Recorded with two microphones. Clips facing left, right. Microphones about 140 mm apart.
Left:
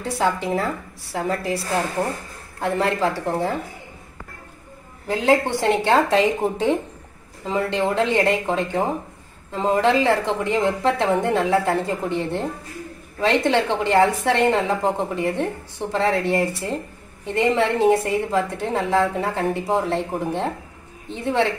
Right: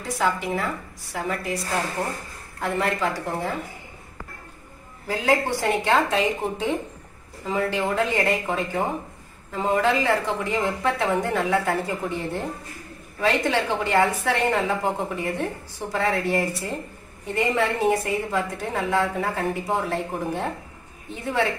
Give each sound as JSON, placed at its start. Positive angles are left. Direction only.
{"t": 0.0, "sound": "a woman's voice", "side_deg": 30}
{"t": 2.6, "sound": "a woman's voice", "side_deg": 30}
{"t": 5.0, "sound": "a woman's voice", "side_deg": 20}